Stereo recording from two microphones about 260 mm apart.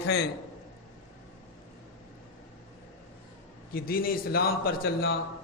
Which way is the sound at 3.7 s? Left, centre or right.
Left.